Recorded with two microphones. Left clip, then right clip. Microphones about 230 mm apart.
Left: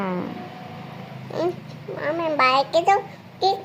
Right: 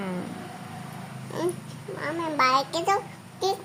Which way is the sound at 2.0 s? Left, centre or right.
Centre.